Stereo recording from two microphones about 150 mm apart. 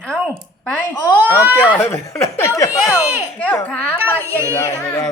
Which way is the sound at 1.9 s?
20° left (ahead or behind).